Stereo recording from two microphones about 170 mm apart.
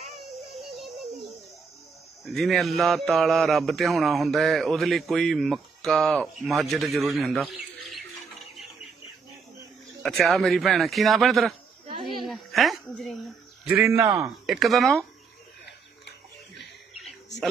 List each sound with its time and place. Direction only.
0.7 s music: centre (ahead or behind)
2.2 s speech: centre (ahead or behind)
10.0 s speech: centre (ahead or behind)
12.0 s a sound: centre (ahead or behind)
13.7 s a man's voice: 10° right (ahead or behind)
14.4 s speech: centre (ahead or behind)
15.6 s a sound: 80° left